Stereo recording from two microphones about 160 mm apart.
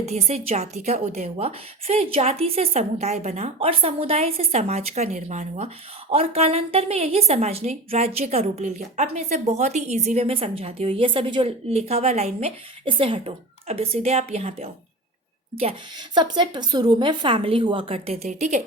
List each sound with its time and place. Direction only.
0.0 s a woman's voice: 40° right (ahead or behind)